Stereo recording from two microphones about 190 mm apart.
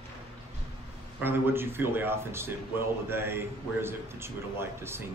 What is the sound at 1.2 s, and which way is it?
A man's voice, 10° right (ahead or behind).